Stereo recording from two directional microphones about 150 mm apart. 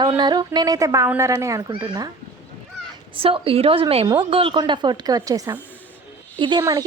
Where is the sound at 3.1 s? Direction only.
35° right (ahead or behind).